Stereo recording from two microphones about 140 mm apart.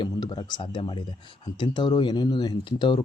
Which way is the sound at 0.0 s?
30° left (ahead or behind).